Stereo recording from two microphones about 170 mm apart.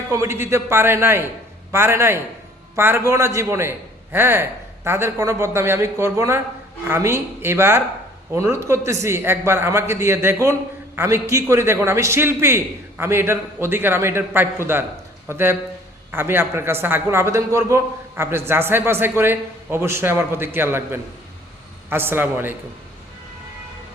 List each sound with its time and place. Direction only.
0.1 s a man's voice: 15° right (ahead or behind)